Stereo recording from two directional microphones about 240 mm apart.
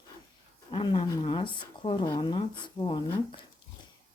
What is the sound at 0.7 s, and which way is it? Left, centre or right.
Speech, centre.